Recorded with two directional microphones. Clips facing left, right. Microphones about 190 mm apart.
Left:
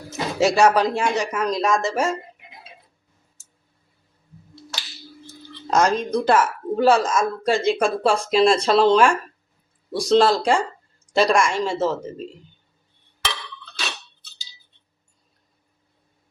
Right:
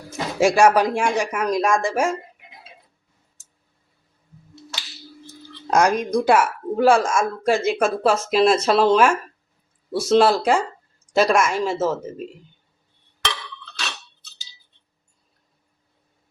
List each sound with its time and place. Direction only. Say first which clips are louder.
0.1 s speech: right 1 dB; 10° right (ahead or behind)
5.7 s speech: right 1 dB; 10° right (ahead or behind)